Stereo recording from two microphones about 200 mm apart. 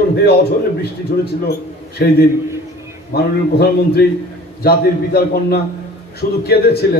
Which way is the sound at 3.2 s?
50° left (ahead or behind).